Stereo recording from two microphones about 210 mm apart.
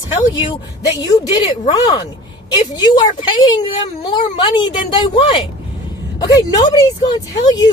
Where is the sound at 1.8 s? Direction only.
20° left (ahead or behind).